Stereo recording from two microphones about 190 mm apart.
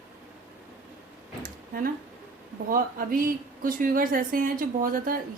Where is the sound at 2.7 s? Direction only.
45° right (ahead or behind).